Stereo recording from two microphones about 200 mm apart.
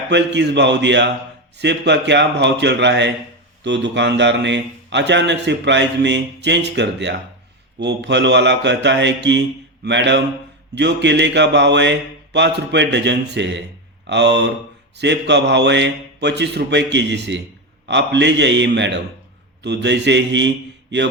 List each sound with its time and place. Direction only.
0.1 s a man's voice: 60° right (ahead or behind)